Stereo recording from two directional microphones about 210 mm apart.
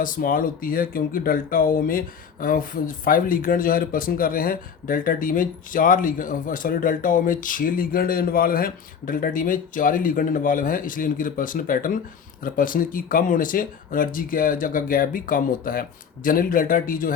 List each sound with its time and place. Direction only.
0.0 s speech: 40° left (ahead or behind)